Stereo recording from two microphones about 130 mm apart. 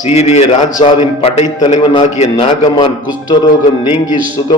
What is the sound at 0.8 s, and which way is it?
Speech, 45° left (ahead or behind).